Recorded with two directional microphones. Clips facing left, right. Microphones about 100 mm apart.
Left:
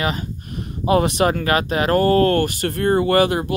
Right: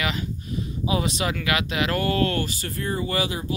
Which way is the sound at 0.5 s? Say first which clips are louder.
Left 8 dB; 55° left (ahead or behind).